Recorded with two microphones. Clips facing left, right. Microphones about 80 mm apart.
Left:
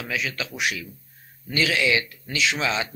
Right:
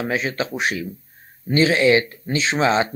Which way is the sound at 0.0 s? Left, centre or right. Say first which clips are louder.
Right 6 dB; right.